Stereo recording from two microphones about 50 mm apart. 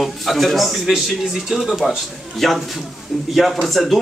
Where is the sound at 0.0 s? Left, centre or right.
Centre.